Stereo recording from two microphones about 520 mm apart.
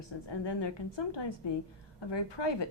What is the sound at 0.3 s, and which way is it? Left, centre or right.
A woman's voice, left.